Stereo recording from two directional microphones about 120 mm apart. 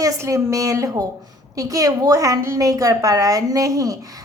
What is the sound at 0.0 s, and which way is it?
A woman's voice, 25° right (ahead or behind).